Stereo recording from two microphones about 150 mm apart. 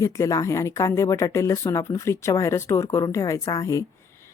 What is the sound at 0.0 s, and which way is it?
Speech, 20° left (ahead or behind).